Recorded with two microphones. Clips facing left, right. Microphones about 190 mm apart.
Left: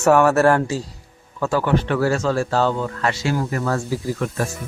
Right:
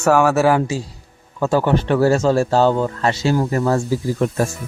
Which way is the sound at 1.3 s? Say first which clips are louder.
Right 4 dB; 20° right (ahead or behind).